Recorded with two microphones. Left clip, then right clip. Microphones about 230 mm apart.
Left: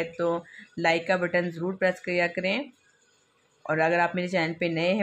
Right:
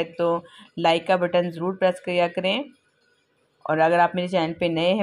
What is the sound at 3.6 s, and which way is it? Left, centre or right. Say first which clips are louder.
Speech: right 5 dB; centre.